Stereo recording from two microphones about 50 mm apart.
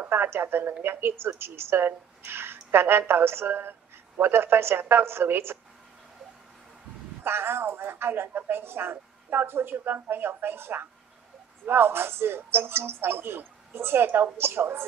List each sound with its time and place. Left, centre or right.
0.0 s a woman's voice: right
7.2 s a woman's voice: right